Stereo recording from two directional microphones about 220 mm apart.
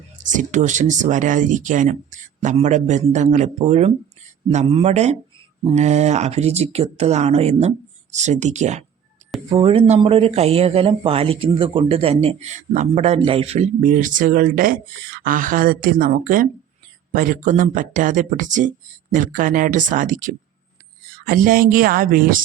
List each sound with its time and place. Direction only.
0.3 s speech: 35° right (ahead or behind)